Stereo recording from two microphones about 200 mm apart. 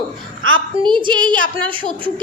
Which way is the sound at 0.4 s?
90° right.